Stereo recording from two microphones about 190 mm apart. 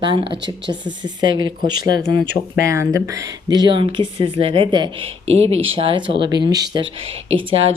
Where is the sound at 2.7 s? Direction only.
15° right (ahead or behind).